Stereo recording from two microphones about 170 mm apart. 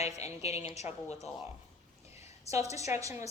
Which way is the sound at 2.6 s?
40° left (ahead or behind).